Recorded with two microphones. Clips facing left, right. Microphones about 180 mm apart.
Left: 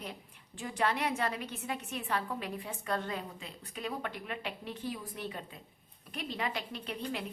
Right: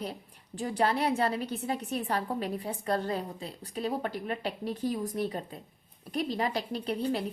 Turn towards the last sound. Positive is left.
turn(degrees=-35)  # may be behind; listen again after turning